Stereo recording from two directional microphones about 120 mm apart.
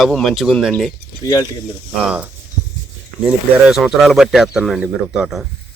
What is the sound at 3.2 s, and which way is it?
Speech, 5° right (ahead or behind).